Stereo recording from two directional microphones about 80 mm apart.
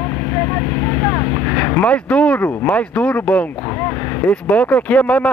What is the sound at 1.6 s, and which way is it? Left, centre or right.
Speech, centre.